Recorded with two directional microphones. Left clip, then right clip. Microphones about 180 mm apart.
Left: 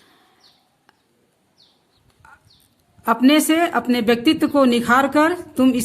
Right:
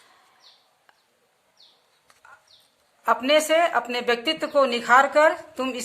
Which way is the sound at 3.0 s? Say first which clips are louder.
Left 3 dB; 60° left (ahead or behind).